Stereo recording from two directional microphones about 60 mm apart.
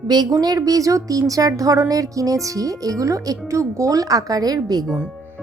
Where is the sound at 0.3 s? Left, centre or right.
Right.